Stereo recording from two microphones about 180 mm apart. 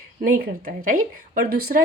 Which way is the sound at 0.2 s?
55° right (ahead or behind).